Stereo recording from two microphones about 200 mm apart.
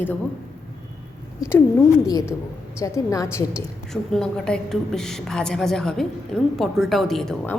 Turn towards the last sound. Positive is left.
turn(degrees=0)  # may be behind; listen again after turning